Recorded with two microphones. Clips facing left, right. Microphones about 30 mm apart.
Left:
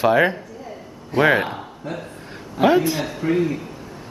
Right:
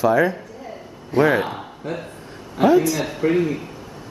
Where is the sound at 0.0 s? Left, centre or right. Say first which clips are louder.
Left 1 dB; left.